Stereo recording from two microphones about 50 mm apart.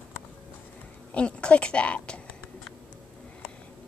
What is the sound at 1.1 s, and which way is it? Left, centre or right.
Speech, left.